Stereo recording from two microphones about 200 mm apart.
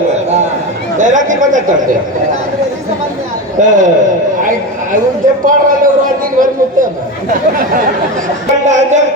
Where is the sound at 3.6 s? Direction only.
40° right (ahead or behind).